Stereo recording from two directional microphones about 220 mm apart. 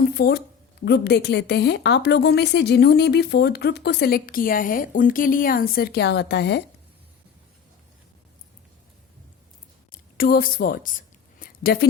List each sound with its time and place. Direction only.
0.1 s a woman's voice: 45° left (ahead or behind)
9.9 s a woman's voice: 40° left (ahead or behind)
11.3 s a sound: 45° left (ahead or behind)